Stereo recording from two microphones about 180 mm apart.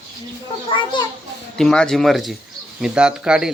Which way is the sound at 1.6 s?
5° left (ahead or behind).